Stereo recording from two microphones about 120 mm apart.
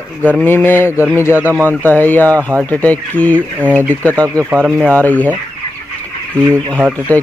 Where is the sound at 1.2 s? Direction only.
20° left (ahead or behind).